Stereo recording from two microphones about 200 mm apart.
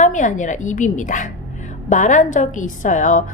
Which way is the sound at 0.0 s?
40° left (ahead or behind).